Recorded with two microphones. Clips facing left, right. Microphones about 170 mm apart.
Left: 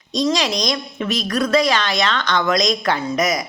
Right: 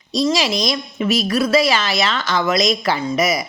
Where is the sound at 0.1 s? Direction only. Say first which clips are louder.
Right 1 dB; 5° right (ahead or behind).